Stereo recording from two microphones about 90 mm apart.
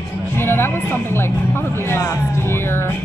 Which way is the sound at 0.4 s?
25° left (ahead or behind).